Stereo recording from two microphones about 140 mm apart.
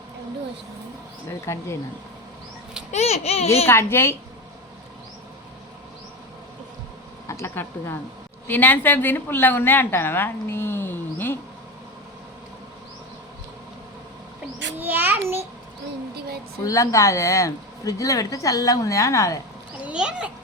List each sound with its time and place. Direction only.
1.3 s speech: 20° left (ahead or behind)
2.9 s a child's voice: 50° left (ahead or behind)
3.7 s a woman's voice: 15° left (ahead or behind)
7.3 s a woman's voice: 20° left (ahead or behind)
14.8 s child singing: 15° right (ahead or behind)
16.6 s speech: 20° left (ahead or behind)
19.8 s a sound: 5° right (ahead or behind)